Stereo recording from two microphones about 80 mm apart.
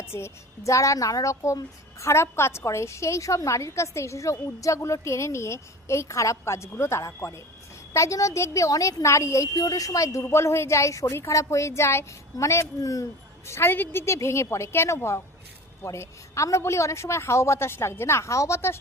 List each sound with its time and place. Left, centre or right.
0.0 s a woman's voice: left
13.5 s a woman's voice: left